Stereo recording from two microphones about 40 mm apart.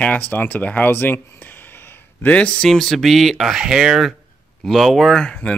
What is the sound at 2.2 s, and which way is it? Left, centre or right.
Speech, left.